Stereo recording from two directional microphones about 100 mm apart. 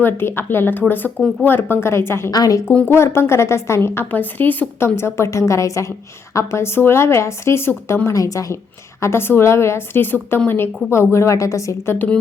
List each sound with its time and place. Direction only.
0.0 s a woman's voice: 25° left (ahead or behind)
2.3 s speech: 40° left (ahead or behind)
2.7 s a woman's voice: 20° left (ahead or behind)
8.0 s a woman's voice: 35° left (ahead or behind)